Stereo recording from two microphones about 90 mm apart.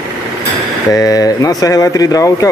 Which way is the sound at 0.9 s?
40° left (ahead or behind).